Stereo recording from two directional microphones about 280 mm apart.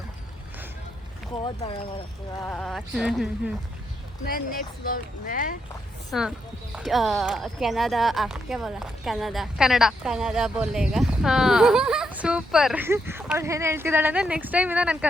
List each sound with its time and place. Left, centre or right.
1.5 s speech: centre
2.4 s speech: centre
4.3 s speech: left
6.1 s speech: centre